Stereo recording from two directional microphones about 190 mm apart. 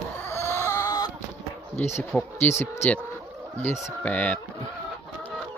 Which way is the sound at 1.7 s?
35° left (ahead or behind).